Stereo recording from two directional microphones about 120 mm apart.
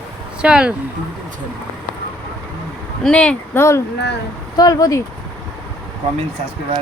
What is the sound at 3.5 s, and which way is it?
Speech, 25° left (ahead or behind).